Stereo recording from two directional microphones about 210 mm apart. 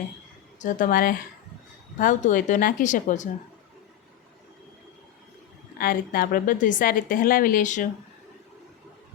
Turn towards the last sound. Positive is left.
turn(degrees=35)  # may be behind; listen again after turning